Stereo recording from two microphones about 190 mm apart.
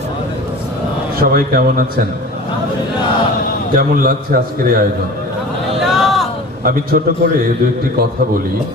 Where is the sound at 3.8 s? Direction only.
50° right (ahead or behind).